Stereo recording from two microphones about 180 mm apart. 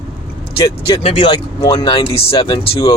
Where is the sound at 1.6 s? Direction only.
20° left (ahead or behind).